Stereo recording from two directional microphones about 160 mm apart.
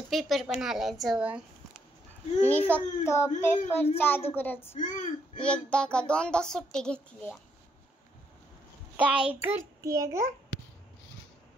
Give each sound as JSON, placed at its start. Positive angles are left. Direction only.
{"t": 0.1, "sound": "a child's voice", "side_deg": 0}
{"t": 2.4, "sound": "speech", "side_deg": 10}
{"t": 4.7, "sound": "speech", "side_deg": 50}
{"t": 5.4, "sound": "speech", "side_deg": 5}
{"t": 8.9, "sound": "a child's voice", "side_deg": -10}